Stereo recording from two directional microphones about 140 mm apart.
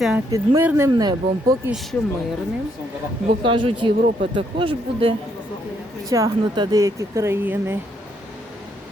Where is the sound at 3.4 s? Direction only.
35° right (ahead or behind).